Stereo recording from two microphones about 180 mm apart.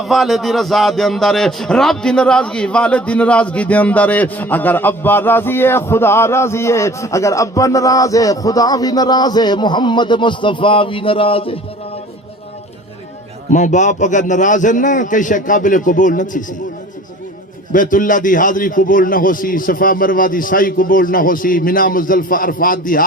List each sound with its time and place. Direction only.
0.0 s a man's voice: centre (ahead or behind); by 11.6 s 30° left (ahead or behind)
13.5 s a man's voice: 45° left (ahead or behind)
17.7 s a man's voice: 45° left (ahead or behind)